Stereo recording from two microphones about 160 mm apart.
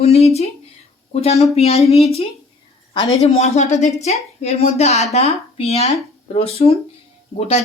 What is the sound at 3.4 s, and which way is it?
A woman's voice, 45° left (ahead or behind).